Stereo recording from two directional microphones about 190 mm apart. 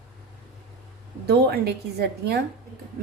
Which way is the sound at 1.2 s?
60° right (ahead or behind).